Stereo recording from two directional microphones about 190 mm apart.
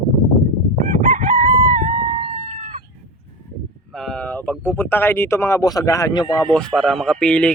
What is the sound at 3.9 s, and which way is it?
Speech, centre (ahead or behind).